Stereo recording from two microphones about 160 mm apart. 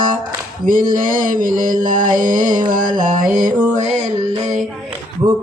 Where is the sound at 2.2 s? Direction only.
55° right (ahead or behind).